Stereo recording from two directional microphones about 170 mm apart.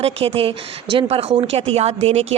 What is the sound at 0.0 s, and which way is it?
A woman's voice, 35° right (ahead or behind).